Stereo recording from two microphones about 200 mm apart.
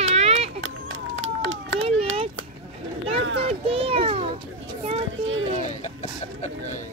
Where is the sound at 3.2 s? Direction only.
65° right (ahead or behind).